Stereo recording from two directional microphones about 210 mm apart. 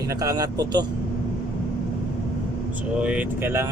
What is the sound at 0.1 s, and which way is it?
Speech, 15° right (ahead or behind).